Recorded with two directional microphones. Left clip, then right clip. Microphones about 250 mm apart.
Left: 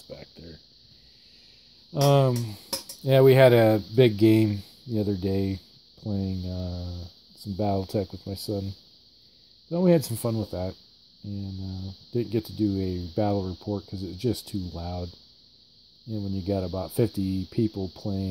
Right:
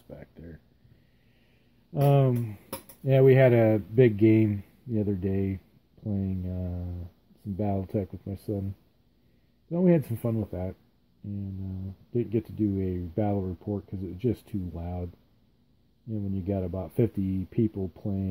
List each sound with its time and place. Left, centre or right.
1.9 s speech: centre
9.7 s speech: centre
12.1 s speech: centre
16.1 s speech: centre